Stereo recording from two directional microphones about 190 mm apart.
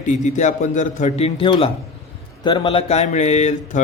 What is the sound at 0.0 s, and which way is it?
Mantra, 40° left (ahead or behind).